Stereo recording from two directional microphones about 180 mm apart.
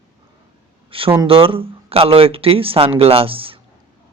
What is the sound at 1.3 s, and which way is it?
Speech, 30° right (ahead or behind).